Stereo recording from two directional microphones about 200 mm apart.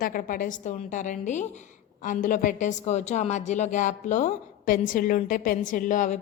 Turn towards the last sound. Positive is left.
turn(degrees=40)  # may be behind; listen again after turning